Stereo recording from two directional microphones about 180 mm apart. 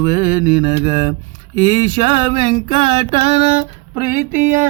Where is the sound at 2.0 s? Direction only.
25° right (ahead or behind).